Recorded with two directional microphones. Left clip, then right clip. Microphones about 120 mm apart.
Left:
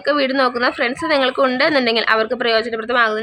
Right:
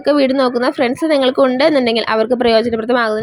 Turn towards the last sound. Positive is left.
turn(degrees=-50)  # may be behind; listen again after turning